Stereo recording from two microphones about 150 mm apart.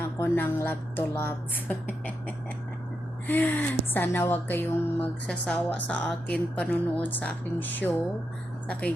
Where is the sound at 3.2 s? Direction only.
10° left (ahead or behind).